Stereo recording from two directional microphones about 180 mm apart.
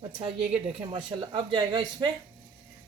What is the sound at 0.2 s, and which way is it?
Speech, 30° right (ahead or behind).